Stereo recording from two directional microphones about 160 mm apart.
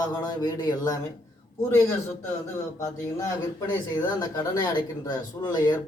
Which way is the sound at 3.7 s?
25° left (ahead or behind).